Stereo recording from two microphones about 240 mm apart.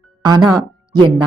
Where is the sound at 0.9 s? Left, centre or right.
Centre.